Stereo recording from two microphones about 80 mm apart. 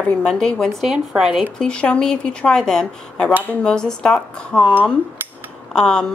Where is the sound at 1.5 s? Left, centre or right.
Centre.